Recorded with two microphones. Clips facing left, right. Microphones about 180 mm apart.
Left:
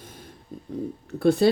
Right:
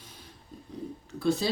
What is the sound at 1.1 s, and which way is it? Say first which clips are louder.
Speech: left 8 dB; 55° left (ahead or behind).